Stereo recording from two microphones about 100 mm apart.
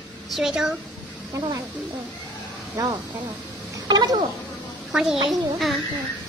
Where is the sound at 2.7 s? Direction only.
35° right (ahead or behind).